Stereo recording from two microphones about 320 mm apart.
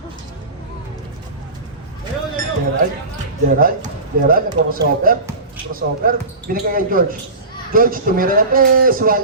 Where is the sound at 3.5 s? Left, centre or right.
Right.